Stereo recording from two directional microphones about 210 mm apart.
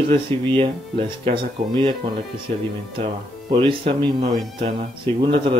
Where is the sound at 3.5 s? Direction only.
25° right (ahead or behind).